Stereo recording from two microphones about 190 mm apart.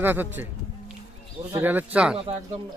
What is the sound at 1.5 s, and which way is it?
Speech, 10° right (ahead or behind).